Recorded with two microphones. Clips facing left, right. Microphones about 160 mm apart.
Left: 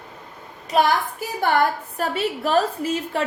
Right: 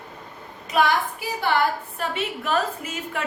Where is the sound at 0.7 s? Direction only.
45° left (ahead or behind).